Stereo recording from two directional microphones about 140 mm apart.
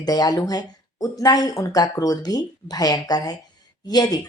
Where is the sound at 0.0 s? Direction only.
30° left (ahead or behind).